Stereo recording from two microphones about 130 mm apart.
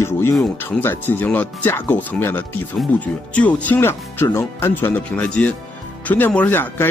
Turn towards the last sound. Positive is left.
turn(degrees=15)  # may be behind; listen again after turning